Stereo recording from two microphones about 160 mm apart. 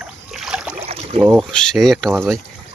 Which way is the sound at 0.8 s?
40° right (ahead or behind).